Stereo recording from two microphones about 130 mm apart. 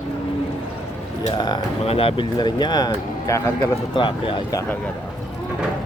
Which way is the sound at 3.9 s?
40° left (ahead or behind).